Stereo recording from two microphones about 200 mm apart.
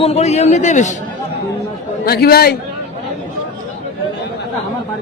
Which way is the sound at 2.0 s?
50° left (ahead or behind).